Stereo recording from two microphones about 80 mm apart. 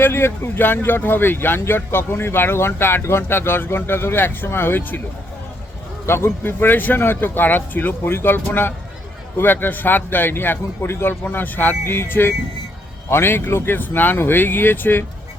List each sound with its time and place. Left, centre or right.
0.0 s speech: left
6.1 s speech: left